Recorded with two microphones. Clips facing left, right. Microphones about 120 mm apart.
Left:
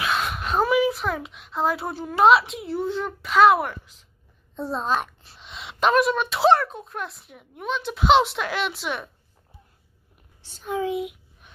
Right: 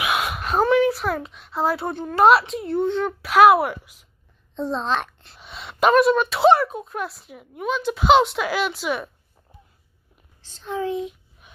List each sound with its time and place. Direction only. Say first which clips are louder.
0.0 s speech: right 2 dB; 10° right (ahead or behind)
4.6 s a child's voice: right 1 dB; 10° left (ahead or behind)
10.4 s a child's voice: even; 10° left (ahead or behind)